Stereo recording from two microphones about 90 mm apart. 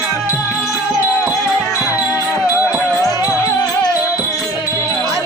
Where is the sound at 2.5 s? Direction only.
20° right (ahead or behind).